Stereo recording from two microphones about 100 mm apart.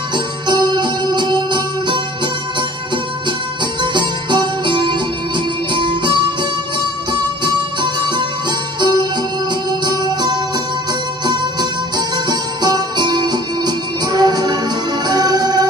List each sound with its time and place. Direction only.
0.5 s music: 45° right (ahead or behind)
3.8 s music: 50° right (ahead or behind)
7.4 s music: 50° right (ahead or behind)
12.3 s music: 45° right (ahead or behind)